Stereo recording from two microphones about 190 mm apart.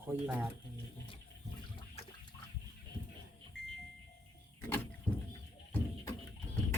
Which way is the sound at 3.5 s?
65° left (ahead or behind).